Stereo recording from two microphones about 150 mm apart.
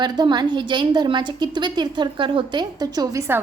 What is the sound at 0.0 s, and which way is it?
A woman's voice, 30° right (ahead or behind).